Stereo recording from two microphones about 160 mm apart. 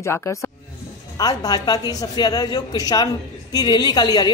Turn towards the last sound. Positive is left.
turn(degrees=25)  # may be behind; listen again after turning